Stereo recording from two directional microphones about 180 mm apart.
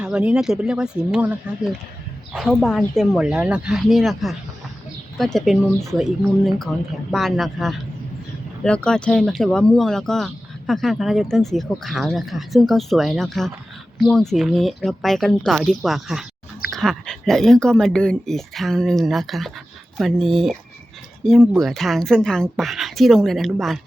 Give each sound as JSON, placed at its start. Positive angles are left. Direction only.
{"t": 0.0, "sound": "speech", "side_deg": -5}